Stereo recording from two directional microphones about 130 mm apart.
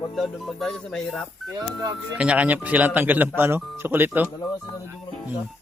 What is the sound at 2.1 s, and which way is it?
Speech, 10° right (ahead or behind).